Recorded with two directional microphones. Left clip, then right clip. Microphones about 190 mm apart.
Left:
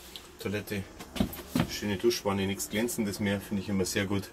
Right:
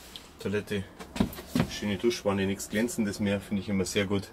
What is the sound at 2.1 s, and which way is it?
Speech, 5° right (ahead or behind).